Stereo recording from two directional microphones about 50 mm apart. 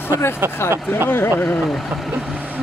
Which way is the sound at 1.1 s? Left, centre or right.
Left.